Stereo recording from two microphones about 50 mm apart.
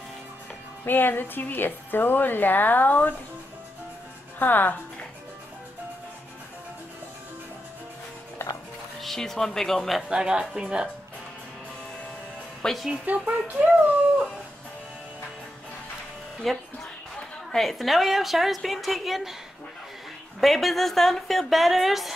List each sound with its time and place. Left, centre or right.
0.8 s speech: left
4.4 s speech: left
8.4 s music: left
9.0 s speech: centre
10.0 s speech: centre
12.6 s speech: centre
13.0 s speech: right
16.5 s a woman's voice: centre
20.3 s a woman's voice: centre